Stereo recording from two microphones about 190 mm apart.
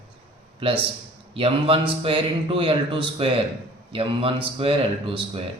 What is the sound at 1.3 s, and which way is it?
A man's voice, 30° right (ahead or behind).